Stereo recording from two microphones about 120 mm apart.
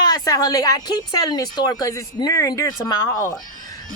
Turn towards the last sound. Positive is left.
turn(degrees=30)  # may be behind; listen again after turning